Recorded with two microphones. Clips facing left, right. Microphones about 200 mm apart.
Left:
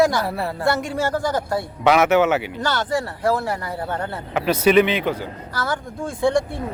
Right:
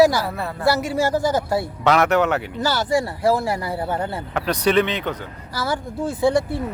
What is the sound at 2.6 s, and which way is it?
Speech, 10° right (ahead or behind).